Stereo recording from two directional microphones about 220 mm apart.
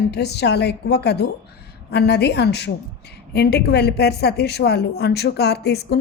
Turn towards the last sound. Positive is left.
turn(degrees=50)  # may be behind; listen again after turning